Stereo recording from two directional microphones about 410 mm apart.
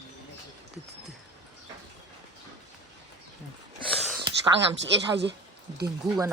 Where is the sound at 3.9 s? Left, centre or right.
Centre.